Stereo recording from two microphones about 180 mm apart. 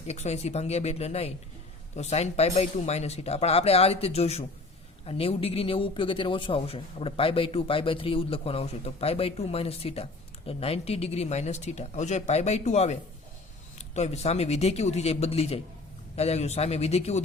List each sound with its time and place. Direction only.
0.1 s a man's voice: 40° left (ahead or behind)